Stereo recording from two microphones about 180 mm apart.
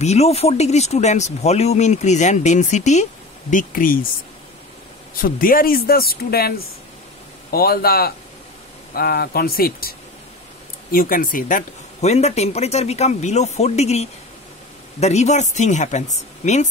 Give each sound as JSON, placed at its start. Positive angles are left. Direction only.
{"t": 0.0, "sound": "speech", "side_deg": 35}
{"t": 5.2, "sound": "speech", "side_deg": 50}
{"t": 7.5, "sound": "speech", "side_deg": 55}